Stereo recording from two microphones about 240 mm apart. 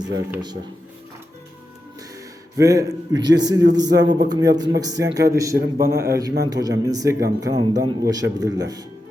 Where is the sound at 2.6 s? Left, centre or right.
Centre.